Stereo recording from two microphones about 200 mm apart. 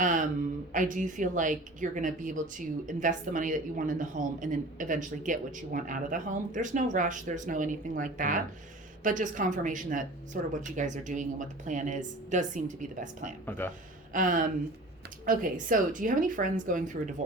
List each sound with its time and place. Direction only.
0.0 s a sound: 40° right (ahead or behind)
0.7 s a woman's voice: 40° right (ahead or behind)
13.4 s speech: 10° left (ahead or behind)
14.1 s a woman's voice: 40° right (ahead or behind)